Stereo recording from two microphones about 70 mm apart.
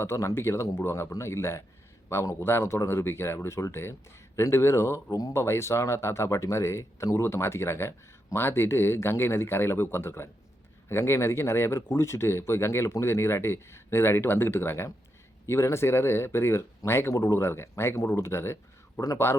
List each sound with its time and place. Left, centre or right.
0.0 s speech: left
17.2 s a man's voice: left
17.4 s speech: left
18.9 s a man's voice: left